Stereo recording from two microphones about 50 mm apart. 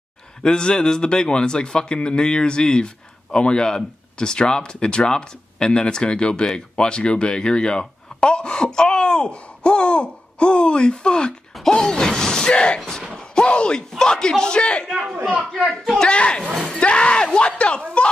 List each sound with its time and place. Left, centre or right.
0.4 s speech: centre
14.9 s a man's voice: centre
16.0 s speech: centre